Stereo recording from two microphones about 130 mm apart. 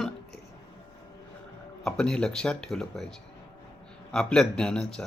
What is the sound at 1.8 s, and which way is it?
Speech, 5° left (ahead or behind).